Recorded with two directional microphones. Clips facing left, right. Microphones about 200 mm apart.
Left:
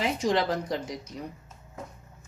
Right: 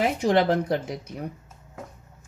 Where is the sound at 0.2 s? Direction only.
60° right (ahead or behind).